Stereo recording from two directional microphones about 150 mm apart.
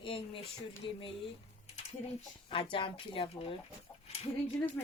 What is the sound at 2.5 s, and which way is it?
A child's voice, 35° left (ahead or behind).